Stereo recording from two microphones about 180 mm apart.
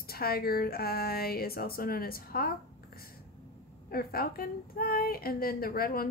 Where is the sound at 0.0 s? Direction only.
55° left (ahead or behind).